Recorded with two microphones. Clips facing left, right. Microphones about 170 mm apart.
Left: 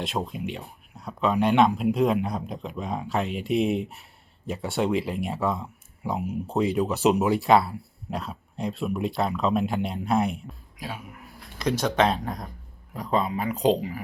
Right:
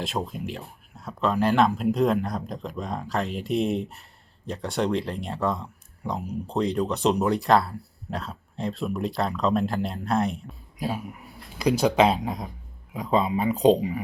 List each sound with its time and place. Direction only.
0.0 s speech: centre (ahead or behind)
13.2 s speech: 20° right (ahead or behind)
13.5 s speech: centre (ahead or behind)